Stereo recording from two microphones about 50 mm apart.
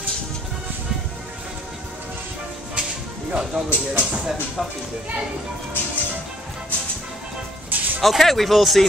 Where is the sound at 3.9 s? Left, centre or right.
Right.